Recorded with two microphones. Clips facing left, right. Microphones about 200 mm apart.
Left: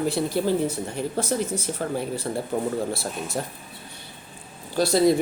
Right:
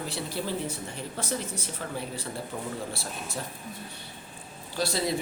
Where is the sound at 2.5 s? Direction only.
55° left (ahead or behind).